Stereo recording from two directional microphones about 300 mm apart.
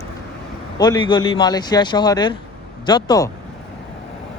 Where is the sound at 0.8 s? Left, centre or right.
Centre.